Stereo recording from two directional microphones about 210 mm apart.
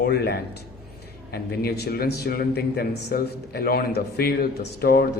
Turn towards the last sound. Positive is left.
turn(degrees=45)  # may be behind; listen again after turning